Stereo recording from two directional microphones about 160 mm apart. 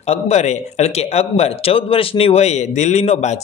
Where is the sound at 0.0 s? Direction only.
40° left (ahead or behind).